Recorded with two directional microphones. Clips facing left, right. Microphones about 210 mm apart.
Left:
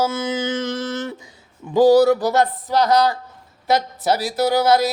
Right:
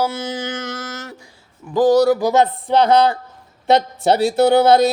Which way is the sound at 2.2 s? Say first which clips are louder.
Right 3 dB; 15° right (ahead or behind).